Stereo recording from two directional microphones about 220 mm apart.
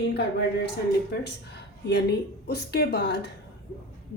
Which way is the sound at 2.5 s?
45° left (ahead or behind).